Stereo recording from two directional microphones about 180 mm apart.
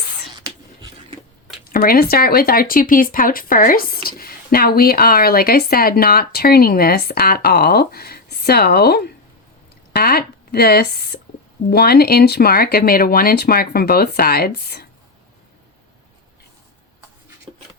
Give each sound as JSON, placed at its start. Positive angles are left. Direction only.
{"t": 1.7, "sound": "speech", "side_deg": 55}